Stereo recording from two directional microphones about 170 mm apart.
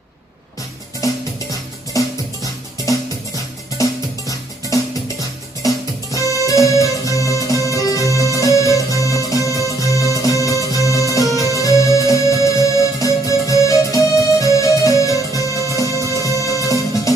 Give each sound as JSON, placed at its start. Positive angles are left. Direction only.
{"t": 1.0, "sound": "music", "side_deg": 20}
{"t": 4.3, "sound": "music", "side_deg": 20}